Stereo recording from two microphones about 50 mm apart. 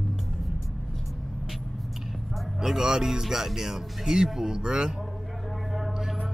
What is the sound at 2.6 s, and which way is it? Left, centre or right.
Speech, centre.